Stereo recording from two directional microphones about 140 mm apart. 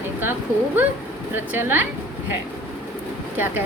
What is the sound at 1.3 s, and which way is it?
Speech, 15° right (ahead or behind).